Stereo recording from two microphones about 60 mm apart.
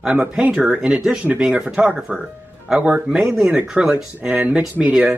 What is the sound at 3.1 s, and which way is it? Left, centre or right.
Speech, centre.